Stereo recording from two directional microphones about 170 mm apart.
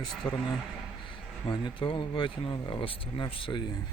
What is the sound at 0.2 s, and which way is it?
Speech, 20° left (ahead or behind).